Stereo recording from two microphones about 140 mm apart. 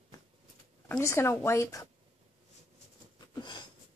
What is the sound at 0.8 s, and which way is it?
Speech, 15° left (ahead or behind).